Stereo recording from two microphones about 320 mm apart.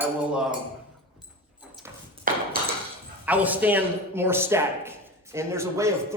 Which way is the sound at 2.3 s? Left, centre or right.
Right.